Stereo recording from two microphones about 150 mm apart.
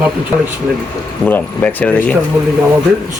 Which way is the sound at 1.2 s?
10° left (ahead or behind).